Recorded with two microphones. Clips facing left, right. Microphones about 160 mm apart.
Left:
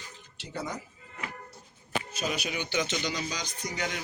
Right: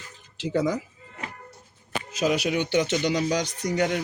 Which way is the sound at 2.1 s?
90° right.